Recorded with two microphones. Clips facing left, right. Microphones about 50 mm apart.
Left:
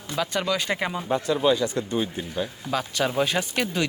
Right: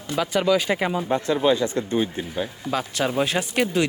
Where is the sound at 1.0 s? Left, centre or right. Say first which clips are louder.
Even; right.